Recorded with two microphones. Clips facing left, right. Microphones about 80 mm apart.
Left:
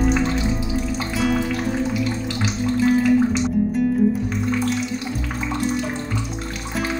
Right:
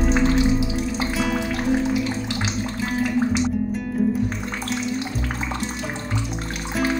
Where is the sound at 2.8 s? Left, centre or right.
Centre.